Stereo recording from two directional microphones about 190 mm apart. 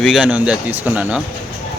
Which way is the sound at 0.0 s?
5° right (ahead or behind).